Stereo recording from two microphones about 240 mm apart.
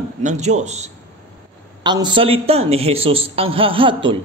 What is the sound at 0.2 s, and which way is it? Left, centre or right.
Speech, right.